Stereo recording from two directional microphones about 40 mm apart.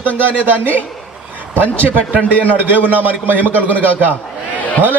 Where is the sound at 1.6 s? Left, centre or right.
Left.